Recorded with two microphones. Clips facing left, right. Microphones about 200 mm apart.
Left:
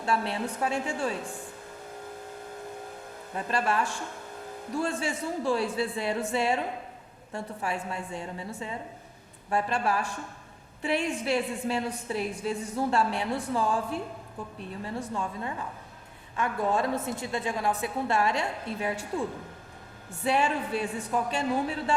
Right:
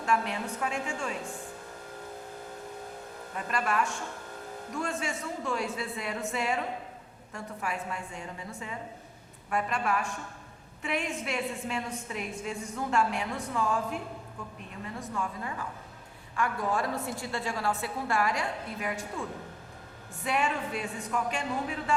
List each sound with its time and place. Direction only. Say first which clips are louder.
0.0 s a woman's voice: left 1 dB; 30° left (ahead or behind)
3.3 s a woman's voice: left 2 dB; 30° left (ahead or behind)
9.5 s a woman's voice: left 2 dB; 30° left (ahead or behind)
20.2 s a woman's voice: left 4 dB; 30° left (ahead or behind)